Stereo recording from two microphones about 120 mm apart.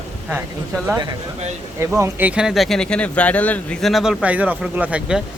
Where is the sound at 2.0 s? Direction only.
15° right (ahead or behind); by 3.8 s 10° left (ahead or behind).